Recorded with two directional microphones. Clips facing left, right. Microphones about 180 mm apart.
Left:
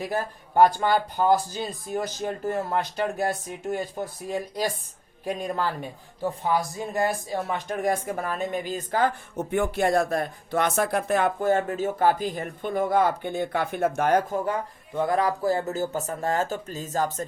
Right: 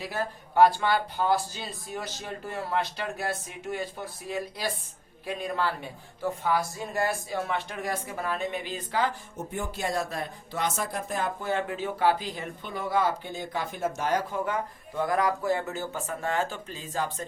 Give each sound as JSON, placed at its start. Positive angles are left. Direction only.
{"t": 0.0, "sound": "speech", "side_deg": 45}
{"t": 6.6, "sound": "speech", "side_deg": 15}
{"t": 7.5, "sound": "speech", "side_deg": 45}
{"t": 9.5, "sound": "speech", "side_deg": 65}
{"t": 11.3, "sound": "speech", "side_deg": 45}
{"t": 14.9, "sound": "speech", "side_deg": 25}